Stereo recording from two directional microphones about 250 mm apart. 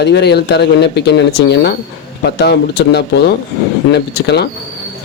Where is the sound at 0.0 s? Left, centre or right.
Left.